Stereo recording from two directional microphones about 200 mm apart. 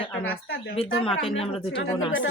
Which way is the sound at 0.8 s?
25° left (ahead or behind).